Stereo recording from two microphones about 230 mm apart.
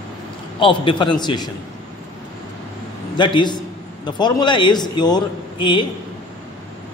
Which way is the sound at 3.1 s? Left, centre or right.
Centre.